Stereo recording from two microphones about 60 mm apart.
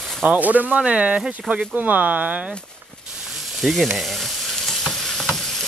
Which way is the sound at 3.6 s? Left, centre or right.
Centre.